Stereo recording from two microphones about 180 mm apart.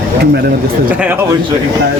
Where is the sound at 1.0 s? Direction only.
10° right (ahead or behind).